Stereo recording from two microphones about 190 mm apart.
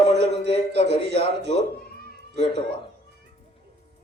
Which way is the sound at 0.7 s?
65° right (ahead or behind).